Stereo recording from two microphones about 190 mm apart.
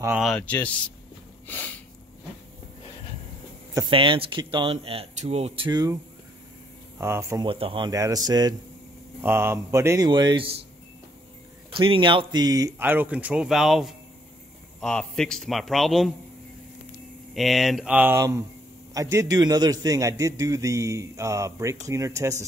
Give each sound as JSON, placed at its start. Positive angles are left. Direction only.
{"t": 0.0, "sound": "a man's voice", "side_deg": -5}
{"t": 1.5, "sound": "a sound", "side_deg": 10}
{"t": 3.7, "sound": "speech", "side_deg": -25}
{"t": 5.7, "sound": "speech", "side_deg": -20}
{"t": 7.0, "sound": "a man's voice", "side_deg": -15}
{"t": 7.4, "sound": "a man's voice", "side_deg": -30}
{"t": 11.7, "sound": "a man's voice", "side_deg": -25}
{"t": 17.3, "sound": "a man's voice", "side_deg": 0}